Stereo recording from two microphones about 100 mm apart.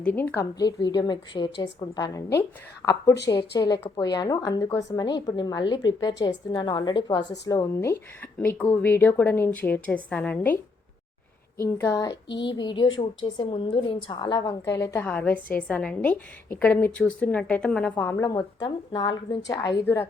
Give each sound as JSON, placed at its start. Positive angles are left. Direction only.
{"t": 0.0, "sound": "a woman's voice", "side_deg": 15}
{"t": 0.6, "sound": "a woman's voice", "side_deg": 45}
{"t": 11.6, "sound": "a woman's voice", "side_deg": 30}
{"t": 12.5, "sound": "a woman's voice", "side_deg": 50}
{"t": 14.6, "sound": "a woman's voice", "side_deg": 30}
{"t": 15.0, "sound": "a woman's voice", "side_deg": 15}
{"t": 18.0, "sound": "a woman's voice", "side_deg": 25}
{"t": 18.3, "sound": "a woman's voice", "side_deg": 45}